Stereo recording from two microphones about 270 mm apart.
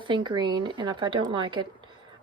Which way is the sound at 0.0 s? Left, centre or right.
Centre.